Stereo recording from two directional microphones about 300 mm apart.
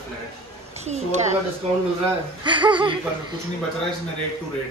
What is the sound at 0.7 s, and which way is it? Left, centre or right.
Speech, right.